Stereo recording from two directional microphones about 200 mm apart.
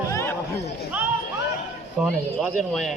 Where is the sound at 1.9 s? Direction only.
Centre (ahead or behind).